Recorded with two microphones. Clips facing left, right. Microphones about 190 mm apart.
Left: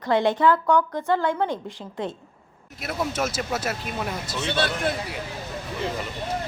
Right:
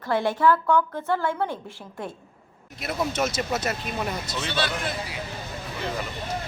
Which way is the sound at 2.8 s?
5° left (ahead or behind).